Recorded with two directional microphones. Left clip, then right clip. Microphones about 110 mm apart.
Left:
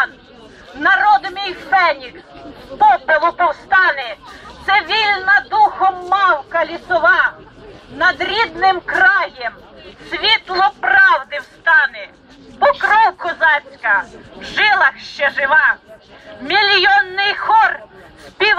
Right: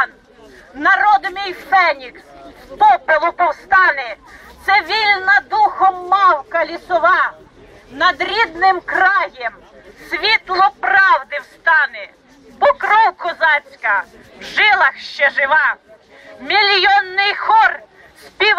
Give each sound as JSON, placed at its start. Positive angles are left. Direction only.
{"t": 0.7, "sound": "speech", "side_deg": -30}